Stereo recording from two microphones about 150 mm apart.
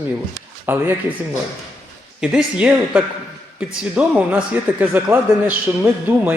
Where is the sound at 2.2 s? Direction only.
5° right (ahead or behind).